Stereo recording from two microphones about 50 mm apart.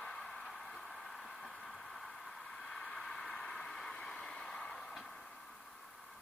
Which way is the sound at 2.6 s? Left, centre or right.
Centre.